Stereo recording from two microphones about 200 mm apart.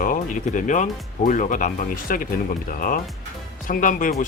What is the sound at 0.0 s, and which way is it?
Speech, 40° left (ahead or behind).